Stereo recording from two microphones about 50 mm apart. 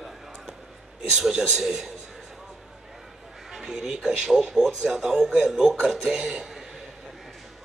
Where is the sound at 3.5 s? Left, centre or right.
Centre.